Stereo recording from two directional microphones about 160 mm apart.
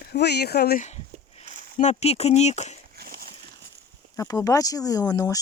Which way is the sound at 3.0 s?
75° right (ahead or behind).